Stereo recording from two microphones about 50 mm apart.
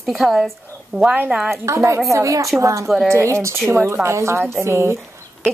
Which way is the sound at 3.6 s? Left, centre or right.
Right.